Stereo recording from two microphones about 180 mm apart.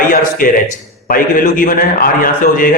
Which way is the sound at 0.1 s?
50° left (ahead or behind).